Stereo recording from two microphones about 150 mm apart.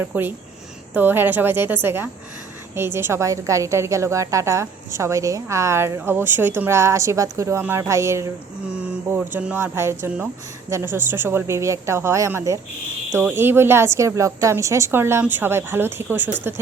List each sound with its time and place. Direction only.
0.0 s a woman's voice: 15° right (ahead or behind)